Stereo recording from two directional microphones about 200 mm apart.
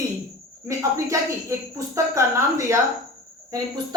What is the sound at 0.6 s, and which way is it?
A woman's voice, 15° right (ahead or behind).